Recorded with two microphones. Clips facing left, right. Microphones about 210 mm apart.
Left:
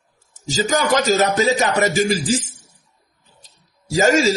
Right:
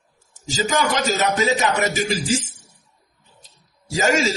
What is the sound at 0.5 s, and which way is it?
Speech, 40° left (ahead or behind).